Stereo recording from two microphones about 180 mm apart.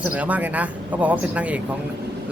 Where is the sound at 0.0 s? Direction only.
5° right (ahead or behind).